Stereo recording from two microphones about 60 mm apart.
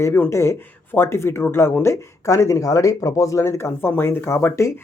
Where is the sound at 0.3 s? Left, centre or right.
Left.